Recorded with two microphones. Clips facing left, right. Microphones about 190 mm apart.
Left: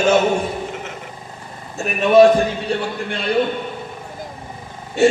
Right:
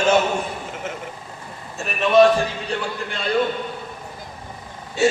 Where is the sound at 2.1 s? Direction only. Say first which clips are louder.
Left 4 dB; 35° left (ahead or behind).